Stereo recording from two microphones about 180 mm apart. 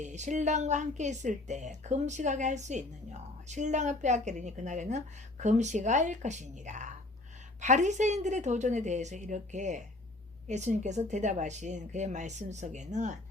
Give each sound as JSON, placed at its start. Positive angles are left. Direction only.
{"t": 0.0, "sound": "a woman's voice", "side_deg": -40}